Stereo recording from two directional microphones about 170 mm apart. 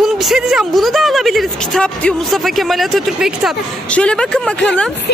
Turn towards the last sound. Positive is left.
turn(degrees=5)  # may be behind; listen again after turning